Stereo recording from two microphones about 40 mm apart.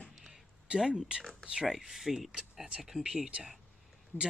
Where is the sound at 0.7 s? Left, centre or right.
Centre.